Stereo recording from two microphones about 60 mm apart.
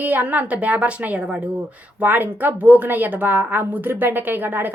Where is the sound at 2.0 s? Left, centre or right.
Right.